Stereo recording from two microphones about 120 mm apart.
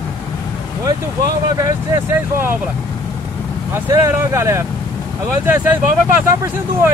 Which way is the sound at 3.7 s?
25° right (ahead or behind).